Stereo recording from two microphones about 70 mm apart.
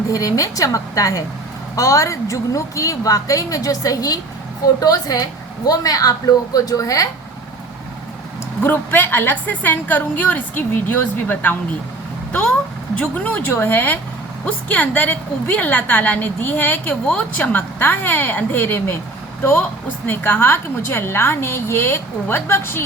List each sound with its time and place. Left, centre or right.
0.1 s a woman's voice: left
8.6 s a woman's voice: left
12.3 s a woman's voice: centre; by 22.8 s left